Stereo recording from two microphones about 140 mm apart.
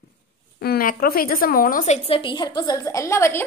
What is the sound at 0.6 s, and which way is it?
A woman's voice, 90° left.